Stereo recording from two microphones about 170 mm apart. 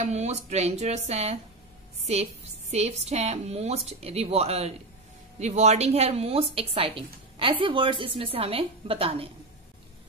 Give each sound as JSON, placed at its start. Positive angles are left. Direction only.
{"t": 0.0, "sound": "a woman's voice", "side_deg": -40}